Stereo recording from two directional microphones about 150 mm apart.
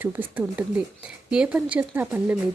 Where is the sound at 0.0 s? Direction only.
10° right (ahead or behind).